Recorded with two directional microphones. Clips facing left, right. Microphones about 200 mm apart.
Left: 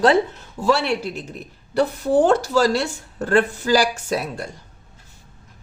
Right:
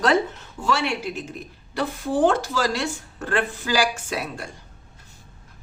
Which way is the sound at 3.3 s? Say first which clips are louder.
Left 6 dB; 40° left (ahead or behind).